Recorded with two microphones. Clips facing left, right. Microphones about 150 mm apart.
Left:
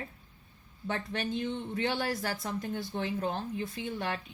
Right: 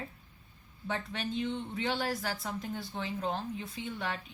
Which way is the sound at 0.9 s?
55° left (ahead or behind).